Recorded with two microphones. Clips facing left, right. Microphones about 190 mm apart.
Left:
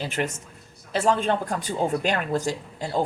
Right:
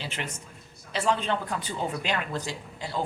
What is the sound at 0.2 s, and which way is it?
Speech, 45° left (ahead or behind).